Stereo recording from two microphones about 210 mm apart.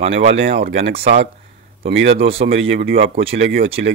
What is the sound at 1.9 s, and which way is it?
Speech, 65° right (ahead or behind).